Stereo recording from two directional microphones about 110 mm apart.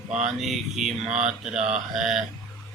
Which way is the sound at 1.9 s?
5° right (ahead or behind).